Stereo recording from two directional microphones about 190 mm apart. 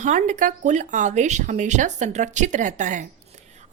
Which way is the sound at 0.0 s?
40° right (ahead or behind).